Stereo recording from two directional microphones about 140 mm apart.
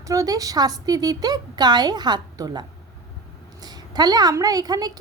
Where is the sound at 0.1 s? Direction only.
25° right (ahead or behind).